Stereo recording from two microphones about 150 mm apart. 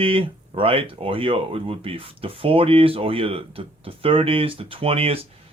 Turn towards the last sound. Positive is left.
turn(degrees=-40)  # may be behind; listen again after turning